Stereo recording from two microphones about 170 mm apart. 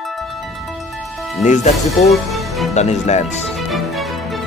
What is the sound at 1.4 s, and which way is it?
Music, 45° left (ahead or behind).